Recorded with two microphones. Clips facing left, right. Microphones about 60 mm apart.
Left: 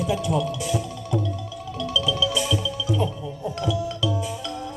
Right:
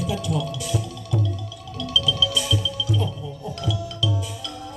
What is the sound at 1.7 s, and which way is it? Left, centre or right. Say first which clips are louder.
Music: even; left.